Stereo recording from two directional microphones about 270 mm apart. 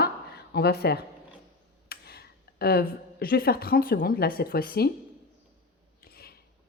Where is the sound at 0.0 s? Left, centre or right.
Left.